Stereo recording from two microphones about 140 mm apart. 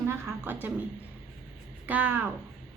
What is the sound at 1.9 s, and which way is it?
Speech, 15° right (ahead or behind).